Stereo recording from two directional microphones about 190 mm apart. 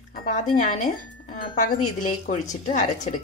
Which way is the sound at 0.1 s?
45° left (ahead or behind).